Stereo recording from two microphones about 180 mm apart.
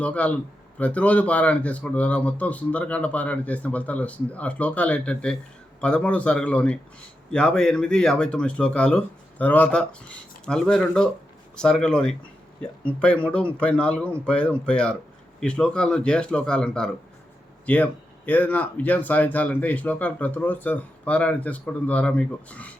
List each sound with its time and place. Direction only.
0.0 s speech: 10° left (ahead or behind)